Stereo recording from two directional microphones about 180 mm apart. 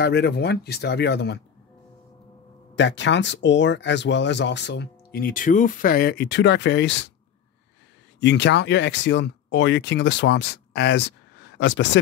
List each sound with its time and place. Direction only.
0.0 s speech: 65° left (ahead or behind)
2.7 s speech: 85° left
8.2 s speech: 75° left (ahead or behind)